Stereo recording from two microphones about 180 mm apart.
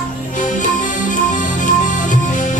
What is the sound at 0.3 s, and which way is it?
Music, 45° left (ahead or behind).